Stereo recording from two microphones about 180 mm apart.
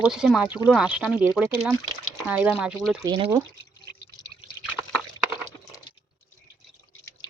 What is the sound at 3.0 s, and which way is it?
Speech, 20° right (ahead or behind).